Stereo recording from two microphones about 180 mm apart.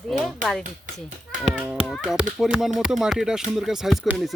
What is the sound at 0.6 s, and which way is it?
Speech, 45° right (ahead or behind).